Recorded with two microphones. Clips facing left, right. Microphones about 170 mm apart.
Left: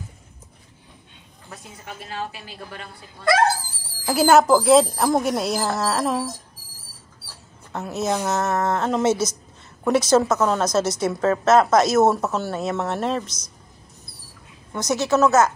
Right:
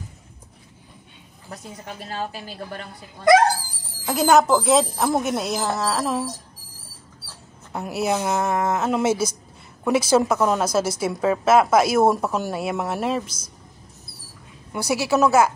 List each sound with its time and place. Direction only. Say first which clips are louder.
3.3 s speech: right 4 dB; 20° right (ahead or behind)
4.0 s speech: left 1 dB; 5° left (ahead or behind)
7.7 s a woman's voice: right 1 dB; 10° right (ahead or behind)
14.7 s a woman's voice: left 1 dB; 10° right (ahead or behind)